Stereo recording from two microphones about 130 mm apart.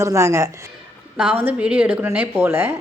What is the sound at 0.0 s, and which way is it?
Speech, 20° right (ahead or behind).